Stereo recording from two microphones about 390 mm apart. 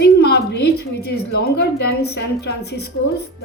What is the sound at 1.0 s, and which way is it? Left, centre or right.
A woman's voice, left.